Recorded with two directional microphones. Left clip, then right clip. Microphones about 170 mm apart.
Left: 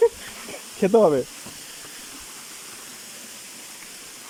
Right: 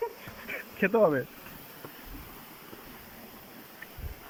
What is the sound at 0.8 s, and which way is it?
Speech, 30° left (ahead or behind).